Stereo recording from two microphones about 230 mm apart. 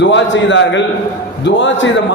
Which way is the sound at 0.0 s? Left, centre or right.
Left.